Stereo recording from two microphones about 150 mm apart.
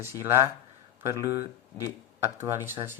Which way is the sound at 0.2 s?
15° right (ahead or behind).